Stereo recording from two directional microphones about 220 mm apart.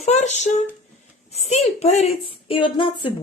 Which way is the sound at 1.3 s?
30° left (ahead or behind).